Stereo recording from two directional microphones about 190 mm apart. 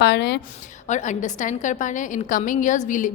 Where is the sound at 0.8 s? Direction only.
40° left (ahead or behind).